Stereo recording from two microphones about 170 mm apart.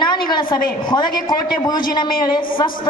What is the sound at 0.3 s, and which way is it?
A woman's voice, 25° left (ahead or behind).